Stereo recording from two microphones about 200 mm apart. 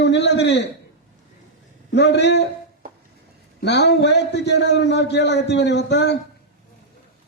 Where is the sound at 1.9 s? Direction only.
60° left (ahead or behind).